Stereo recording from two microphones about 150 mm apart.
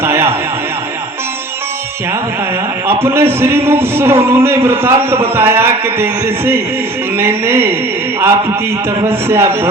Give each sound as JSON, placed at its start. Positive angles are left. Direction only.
{"t": 0.0, "sound": "a sound", "side_deg": -15}
{"t": 3.0, "sound": "speech", "side_deg": -15}
{"t": 9.0, "sound": "speech", "side_deg": -15}